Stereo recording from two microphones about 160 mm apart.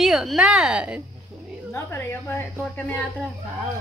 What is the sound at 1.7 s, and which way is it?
Speech, 15° left (ahead or behind).